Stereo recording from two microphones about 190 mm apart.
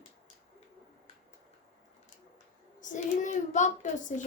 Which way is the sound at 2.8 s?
40° left (ahead or behind).